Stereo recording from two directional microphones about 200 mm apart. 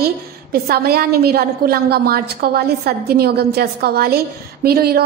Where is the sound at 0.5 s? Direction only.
50° right (ahead or behind).